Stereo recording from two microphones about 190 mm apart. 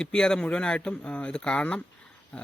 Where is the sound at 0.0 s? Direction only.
5° left (ahead or behind).